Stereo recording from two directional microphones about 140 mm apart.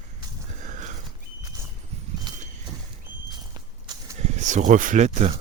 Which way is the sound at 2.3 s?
30° right (ahead or behind).